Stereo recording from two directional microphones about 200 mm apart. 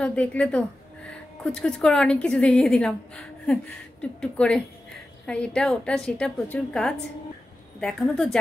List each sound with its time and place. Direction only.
0.0 s a woman's voice: 5° left (ahead or behind)